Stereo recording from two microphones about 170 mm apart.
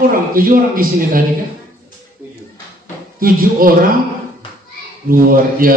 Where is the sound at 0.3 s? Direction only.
55° right (ahead or behind).